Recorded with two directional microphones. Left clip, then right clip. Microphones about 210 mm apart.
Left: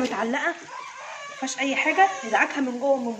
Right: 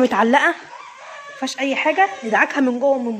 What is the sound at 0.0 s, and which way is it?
A woman's voice, 50° right (ahead or behind).